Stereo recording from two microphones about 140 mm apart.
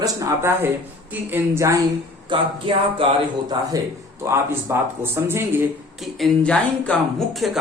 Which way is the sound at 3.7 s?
25° right (ahead or behind).